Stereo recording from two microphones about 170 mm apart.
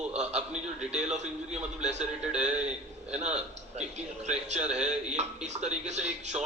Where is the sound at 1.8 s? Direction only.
40° right (ahead or behind).